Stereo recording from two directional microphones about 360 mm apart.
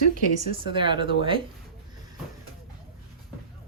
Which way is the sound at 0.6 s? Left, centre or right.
Centre.